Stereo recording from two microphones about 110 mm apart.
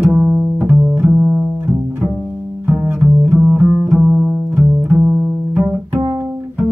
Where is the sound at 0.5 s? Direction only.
15° right (ahead or behind).